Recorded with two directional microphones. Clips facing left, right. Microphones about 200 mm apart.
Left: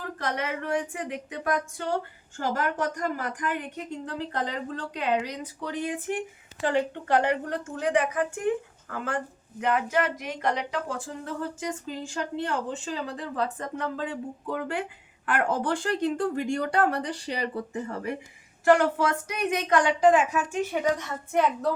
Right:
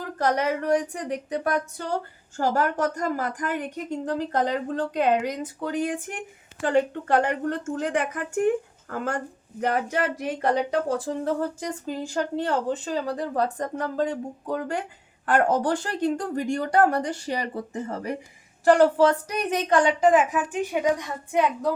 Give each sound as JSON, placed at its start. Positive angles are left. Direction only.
{"t": 0.2, "sound": "a woman's voice", "side_deg": -40}
{"t": 20.1, "sound": "a woman's voice", "side_deg": -15}